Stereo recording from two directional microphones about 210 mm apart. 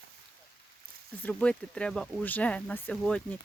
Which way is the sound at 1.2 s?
5° left (ahead or behind).